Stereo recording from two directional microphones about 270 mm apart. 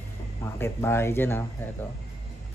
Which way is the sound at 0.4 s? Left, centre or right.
Centre.